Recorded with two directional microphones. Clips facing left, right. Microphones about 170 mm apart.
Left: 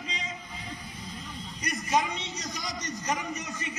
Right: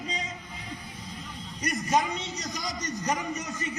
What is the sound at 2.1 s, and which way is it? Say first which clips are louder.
A man's voice: right 2 dB; centre (ahead or behind).